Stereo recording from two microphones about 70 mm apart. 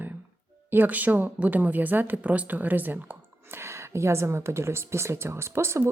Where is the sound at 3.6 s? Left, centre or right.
Right.